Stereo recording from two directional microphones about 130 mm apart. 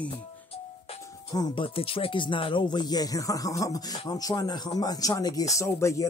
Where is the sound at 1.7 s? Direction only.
45° left (ahead or behind).